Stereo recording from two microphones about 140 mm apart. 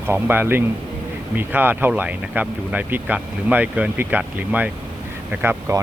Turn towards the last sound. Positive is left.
turn(degrees=-20)  # may be behind; listen again after turning